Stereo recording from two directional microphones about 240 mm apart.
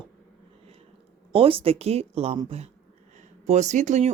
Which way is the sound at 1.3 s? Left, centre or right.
Right.